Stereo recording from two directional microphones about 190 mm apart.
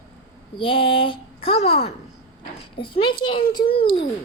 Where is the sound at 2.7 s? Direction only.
25° left (ahead or behind).